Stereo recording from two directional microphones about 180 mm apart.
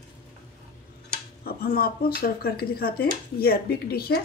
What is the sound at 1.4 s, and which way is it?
Speech, 55° left (ahead or behind).